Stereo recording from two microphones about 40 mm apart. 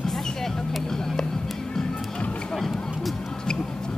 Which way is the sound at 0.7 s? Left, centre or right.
Centre.